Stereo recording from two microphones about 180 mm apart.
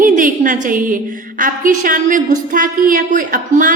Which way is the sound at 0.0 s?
45° right (ahead or behind).